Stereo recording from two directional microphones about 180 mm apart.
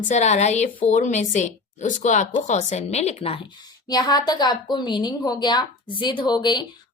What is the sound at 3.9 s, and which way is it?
Speech, 20° left (ahead or behind).